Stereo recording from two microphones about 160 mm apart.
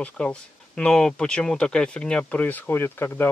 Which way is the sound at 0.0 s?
5° left (ahead or behind).